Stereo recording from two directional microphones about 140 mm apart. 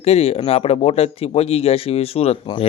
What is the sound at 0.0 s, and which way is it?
Speech, 45° left (ahead or behind).